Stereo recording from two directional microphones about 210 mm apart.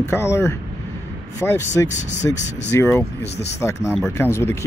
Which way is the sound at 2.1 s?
35° left (ahead or behind).